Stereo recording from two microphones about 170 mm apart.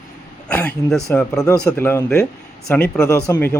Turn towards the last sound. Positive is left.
turn(degrees=10)  # may be behind; listen again after turning